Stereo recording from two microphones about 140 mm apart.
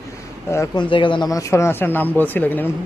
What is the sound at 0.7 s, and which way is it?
Speech, 35° left (ahead or behind).